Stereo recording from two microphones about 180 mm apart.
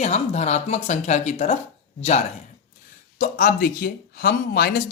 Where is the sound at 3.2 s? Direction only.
50° left (ahead or behind).